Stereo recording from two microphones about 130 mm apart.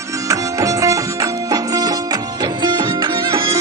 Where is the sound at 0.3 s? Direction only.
25° right (ahead or behind).